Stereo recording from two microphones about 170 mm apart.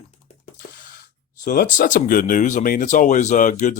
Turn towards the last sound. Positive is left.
turn(degrees=45)  # may be behind; listen again after turning